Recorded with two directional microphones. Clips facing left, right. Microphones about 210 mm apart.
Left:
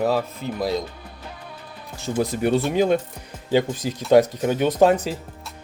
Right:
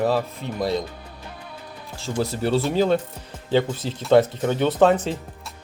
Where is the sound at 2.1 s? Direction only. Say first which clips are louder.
Left 2 dB; 15° left (ahead or behind).